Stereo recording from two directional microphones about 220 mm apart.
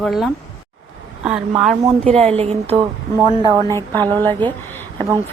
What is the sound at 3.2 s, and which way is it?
Speech, 20° left (ahead or behind).